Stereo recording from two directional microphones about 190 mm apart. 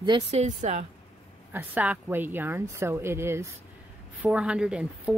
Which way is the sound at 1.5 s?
10° right (ahead or behind).